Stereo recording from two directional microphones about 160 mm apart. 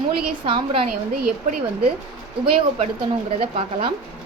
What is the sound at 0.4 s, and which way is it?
Speech, 35° right (ahead or behind).